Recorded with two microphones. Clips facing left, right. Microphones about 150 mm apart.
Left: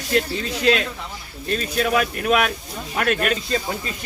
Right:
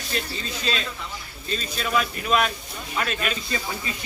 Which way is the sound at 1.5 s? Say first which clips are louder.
Left 5 dB; 60° left (ahead or behind).